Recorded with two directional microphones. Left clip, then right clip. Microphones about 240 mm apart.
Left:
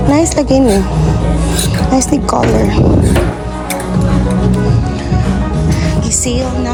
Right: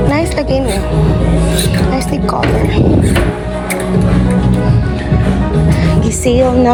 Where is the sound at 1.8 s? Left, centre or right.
Left.